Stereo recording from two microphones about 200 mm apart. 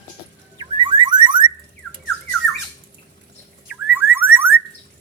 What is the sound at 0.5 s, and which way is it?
Car alarm, 20° right (ahead or behind).